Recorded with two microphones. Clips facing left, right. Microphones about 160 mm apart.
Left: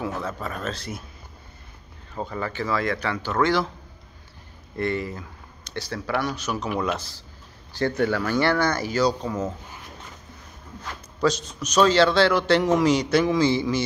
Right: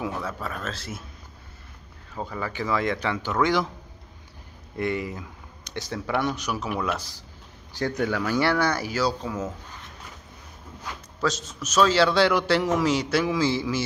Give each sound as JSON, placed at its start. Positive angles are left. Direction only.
{"t": 0.0, "sound": "a man's voice", "side_deg": -10}
{"t": 2.1, "sound": "speech", "side_deg": -5}
{"t": 4.7, "sound": "speech", "side_deg": -10}
{"t": 6.5, "sound": "speech", "side_deg": -5}
{"t": 11.2, "sound": "a man's voice", "side_deg": 0}